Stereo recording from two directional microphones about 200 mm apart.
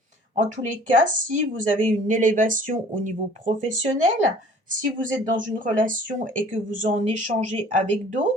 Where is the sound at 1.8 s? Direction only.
40° right (ahead or behind).